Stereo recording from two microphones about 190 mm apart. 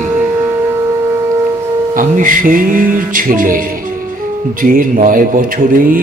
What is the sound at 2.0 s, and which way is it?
Music, 45° right (ahead or behind).